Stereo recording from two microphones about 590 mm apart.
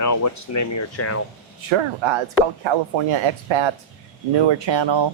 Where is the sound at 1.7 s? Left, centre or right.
Right.